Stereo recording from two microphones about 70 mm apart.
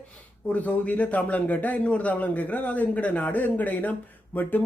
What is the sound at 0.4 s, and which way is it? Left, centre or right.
A man's voice, left.